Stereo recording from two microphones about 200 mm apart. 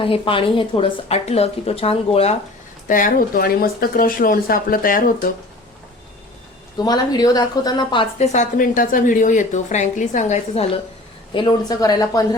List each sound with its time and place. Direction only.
0.0 s a woman's voice: 25° left (ahead or behind)
2.8 s speech: 40° left (ahead or behind)
6.7 s a woman's voice: 20° left (ahead or behind)
8.2 s a woman's voice: 35° left (ahead or behind)
11.3 s a woman's voice: 20° left (ahead or behind)